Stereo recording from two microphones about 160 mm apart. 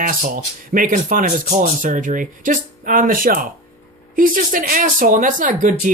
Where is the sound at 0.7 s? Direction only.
55° right (ahead or behind).